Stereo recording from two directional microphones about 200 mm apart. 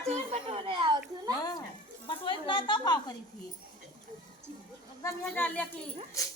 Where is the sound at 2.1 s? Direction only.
25° left (ahead or behind).